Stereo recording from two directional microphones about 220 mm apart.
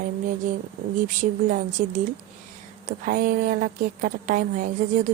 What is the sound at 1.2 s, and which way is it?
A woman's voice, 35° right (ahead or behind).